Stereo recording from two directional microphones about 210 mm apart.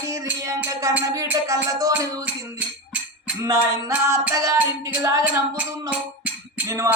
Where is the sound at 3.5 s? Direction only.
10° right (ahead or behind).